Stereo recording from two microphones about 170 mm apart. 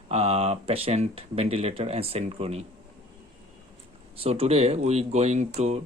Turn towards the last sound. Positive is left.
turn(degrees=-40)  # may be behind; listen again after turning